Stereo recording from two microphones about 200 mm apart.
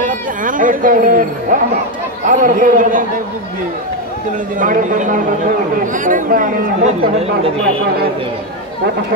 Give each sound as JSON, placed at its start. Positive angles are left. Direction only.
{"t": 0.0, "sound": "speech", "side_deg": -40}
{"t": 4.6, "sound": "speech", "side_deg": -40}